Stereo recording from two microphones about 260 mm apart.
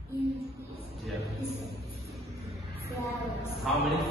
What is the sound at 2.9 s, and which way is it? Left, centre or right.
Music, centre.